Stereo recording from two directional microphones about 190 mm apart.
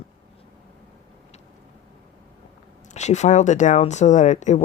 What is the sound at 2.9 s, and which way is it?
Speech, 40° left (ahead or behind).